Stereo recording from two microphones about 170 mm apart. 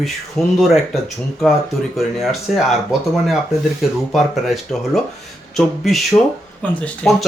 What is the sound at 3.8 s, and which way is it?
Speech, centre (ahead or behind).